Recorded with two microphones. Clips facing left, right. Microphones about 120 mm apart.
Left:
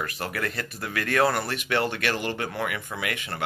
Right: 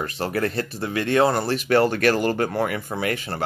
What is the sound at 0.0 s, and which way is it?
Speech, 30° right (ahead or behind).